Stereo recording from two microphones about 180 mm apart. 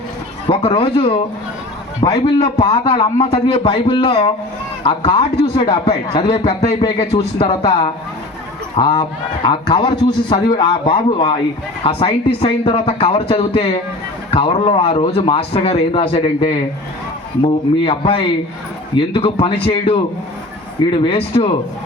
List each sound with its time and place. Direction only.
0.4 s speech: 30° left (ahead or behind)
2.0 s a man's voice: 20° left (ahead or behind)
2.4 s a man's voice: 30° left (ahead or behind)
7.0 s a man's voice: 35° left (ahead or behind)
17.8 s a man's voice: 30° left (ahead or behind)
21.0 s speech: 30° left (ahead or behind)